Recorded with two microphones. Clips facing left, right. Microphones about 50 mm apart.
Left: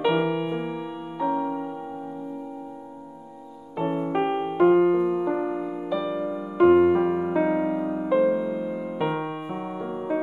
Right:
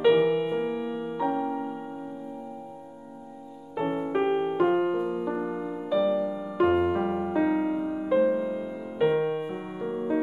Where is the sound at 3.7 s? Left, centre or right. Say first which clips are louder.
Left 2 dB; centre.